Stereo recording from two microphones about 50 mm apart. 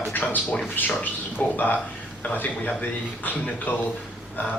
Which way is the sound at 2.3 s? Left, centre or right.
Left.